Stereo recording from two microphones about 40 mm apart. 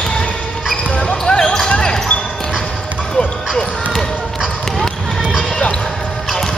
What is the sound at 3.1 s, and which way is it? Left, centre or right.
Run, centre.